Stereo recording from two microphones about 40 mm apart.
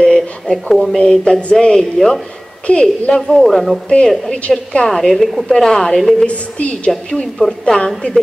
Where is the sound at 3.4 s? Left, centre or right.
Centre.